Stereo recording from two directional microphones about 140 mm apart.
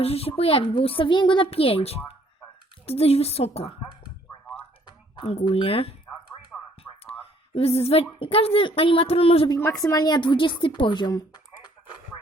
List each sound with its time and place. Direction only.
0.0 s a woman's voice: 45° left (ahead or behind)
5.1 s a woman's voice: 40° left (ahead or behind)
6.5 s a sound: 5° left (ahead or behind)
7.0 s a sound: 45° left (ahead or behind)
8.2 s a woman's voice: 40° left (ahead or behind)
9.6 s a woman's voice: 20° left (ahead or behind)